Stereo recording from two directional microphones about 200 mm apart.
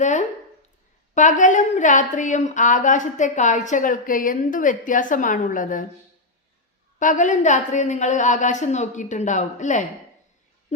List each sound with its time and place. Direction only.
0.0 s a woman's voice: 35° left (ahead or behind)
7.0 s a woman's voice: 40° left (ahead or behind)